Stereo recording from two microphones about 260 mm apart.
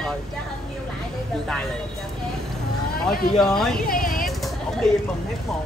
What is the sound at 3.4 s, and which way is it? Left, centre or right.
Speech, centre.